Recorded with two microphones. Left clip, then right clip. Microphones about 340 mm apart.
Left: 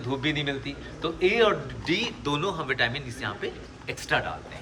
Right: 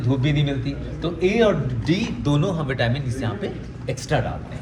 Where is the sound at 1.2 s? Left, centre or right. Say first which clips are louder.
Right 3 dB; centre.